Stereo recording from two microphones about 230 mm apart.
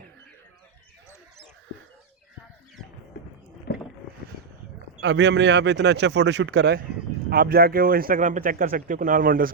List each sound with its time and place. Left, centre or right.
4.9 s speech: right